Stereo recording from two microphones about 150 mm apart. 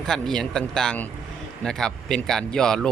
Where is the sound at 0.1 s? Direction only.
5° left (ahead or behind).